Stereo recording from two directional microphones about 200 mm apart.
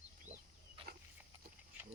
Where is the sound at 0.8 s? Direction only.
25° right (ahead or behind).